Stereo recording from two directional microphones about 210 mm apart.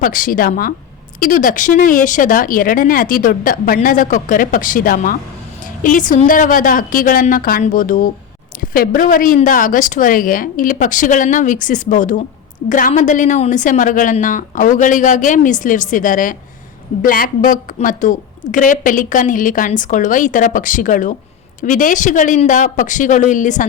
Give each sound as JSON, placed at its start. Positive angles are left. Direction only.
{"t": 0.0, "sound": "a woman's voice", "side_deg": 40}